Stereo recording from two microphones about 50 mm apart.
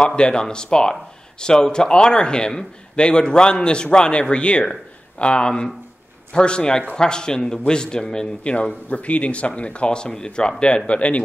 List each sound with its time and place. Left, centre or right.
0.0 s a man's voice: centre